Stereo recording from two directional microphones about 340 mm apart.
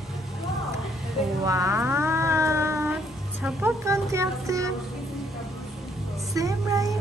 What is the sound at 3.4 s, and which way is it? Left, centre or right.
Music, centre.